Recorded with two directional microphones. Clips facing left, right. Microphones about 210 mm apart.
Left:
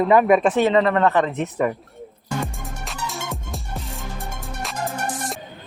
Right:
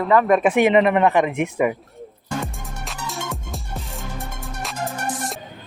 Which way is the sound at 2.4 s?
Centre (ahead or behind).